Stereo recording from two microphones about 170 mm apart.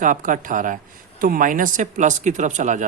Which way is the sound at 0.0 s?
50° right (ahead or behind).